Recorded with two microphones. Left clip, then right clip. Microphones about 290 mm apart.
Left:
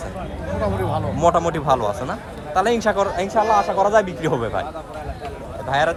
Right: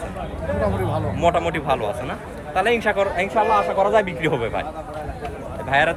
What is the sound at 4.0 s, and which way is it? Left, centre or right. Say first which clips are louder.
Speech: left 1 dB; left.